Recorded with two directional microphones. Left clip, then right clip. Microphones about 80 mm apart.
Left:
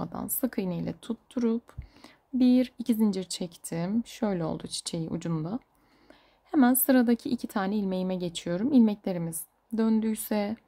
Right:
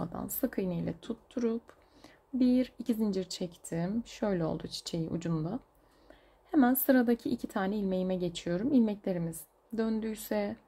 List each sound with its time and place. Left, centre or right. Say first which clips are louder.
0.0 s a woman's voice: left 2 dB; left